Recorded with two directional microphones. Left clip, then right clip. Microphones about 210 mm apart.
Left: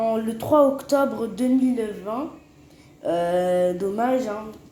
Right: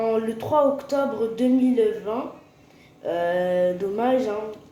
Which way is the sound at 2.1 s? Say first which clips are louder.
Right 1 dB; 30° left (ahead or behind).